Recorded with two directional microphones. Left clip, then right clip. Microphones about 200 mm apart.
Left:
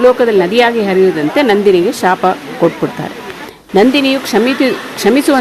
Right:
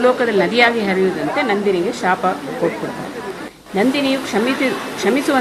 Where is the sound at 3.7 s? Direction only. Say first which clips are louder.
Left 7 dB; 50° left (ahead or behind).